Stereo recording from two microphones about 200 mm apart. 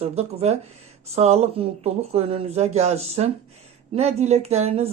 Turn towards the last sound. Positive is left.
turn(degrees=-30)  # may be behind; listen again after turning